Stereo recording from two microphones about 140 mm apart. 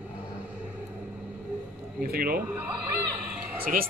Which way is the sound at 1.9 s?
90° right.